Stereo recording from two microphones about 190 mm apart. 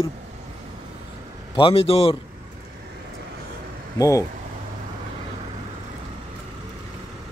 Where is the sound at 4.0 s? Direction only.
15° left (ahead or behind).